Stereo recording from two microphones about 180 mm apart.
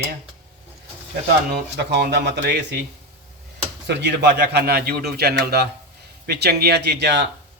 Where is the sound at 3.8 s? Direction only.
70° right (ahead or behind).